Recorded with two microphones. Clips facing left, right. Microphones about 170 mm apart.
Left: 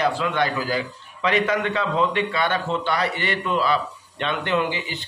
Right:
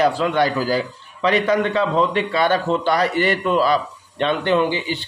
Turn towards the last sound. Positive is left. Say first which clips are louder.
# right 5 dB
turn(degrees=-30)  # may be behind; listen again after turning